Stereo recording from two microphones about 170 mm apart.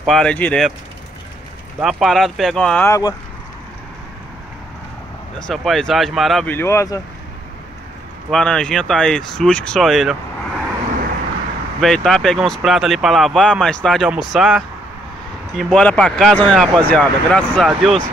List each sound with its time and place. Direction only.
0.0 s speech: centre (ahead or behind)
1.8 s speech: centre (ahead or behind)
2.9 s speech: 20° left (ahead or behind)
5.5 s speech: centre (ahead or behind)
6.5 s speech: 15° left (ahead or behind)
8.3 s speech: 5° left (ahead or behind)
11.8 s speech: centre (ahead or behind)